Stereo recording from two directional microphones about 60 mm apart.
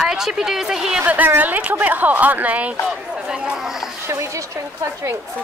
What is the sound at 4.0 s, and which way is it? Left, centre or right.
Speech, right.